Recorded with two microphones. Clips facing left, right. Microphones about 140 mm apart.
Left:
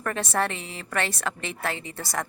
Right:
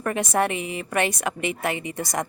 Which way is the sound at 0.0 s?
15° right (ahead or behind).